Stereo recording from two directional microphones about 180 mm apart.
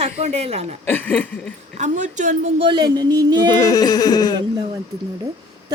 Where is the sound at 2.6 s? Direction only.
25° right (ahead or behind).